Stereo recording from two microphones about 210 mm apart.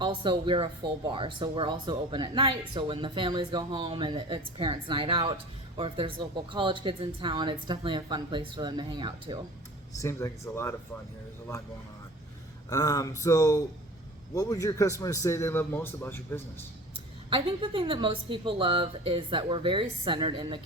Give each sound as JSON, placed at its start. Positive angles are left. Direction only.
{"t": 0.0, "sound": "speech", "side_deg": -25}
{"t": 10.0, "sound": "a man's voice", "side_deg": 15}
{"t": 12.7, "sound": "a man's voice", "side_deg": 15}
{"t": 17.2, "sound": "speech", "side_deg": -25}